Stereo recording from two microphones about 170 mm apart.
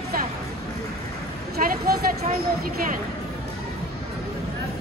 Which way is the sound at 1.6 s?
55° right (ahead or behind).